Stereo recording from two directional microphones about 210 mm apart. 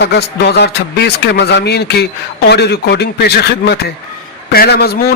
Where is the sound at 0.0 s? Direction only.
50° left (ahead or behind).